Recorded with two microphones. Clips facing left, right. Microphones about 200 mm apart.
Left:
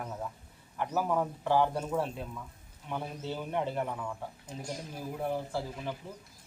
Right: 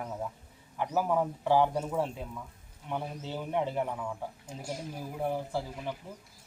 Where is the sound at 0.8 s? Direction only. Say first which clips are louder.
Right 2 dB; 15° right (ahead or behind).